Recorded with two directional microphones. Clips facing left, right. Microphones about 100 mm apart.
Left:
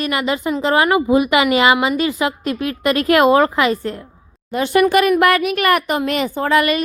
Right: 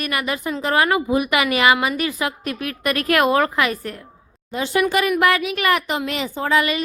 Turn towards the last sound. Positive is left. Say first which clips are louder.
# left 4 dB
turn(degrees=55)  # may be behind; listen again after turning